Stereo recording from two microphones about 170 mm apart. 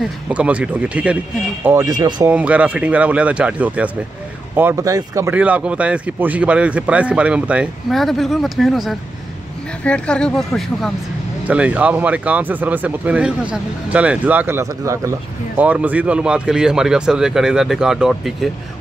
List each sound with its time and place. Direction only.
0.0 s speech: 5° right (ahead or behind); by 2.2 s 25° right (ahead or behind)
2.2 s speech: 10° right (ahead or behind)
11.4 s speech: 10° right (ahead or behind)